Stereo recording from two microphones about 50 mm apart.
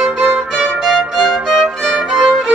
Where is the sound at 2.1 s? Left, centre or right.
Centre.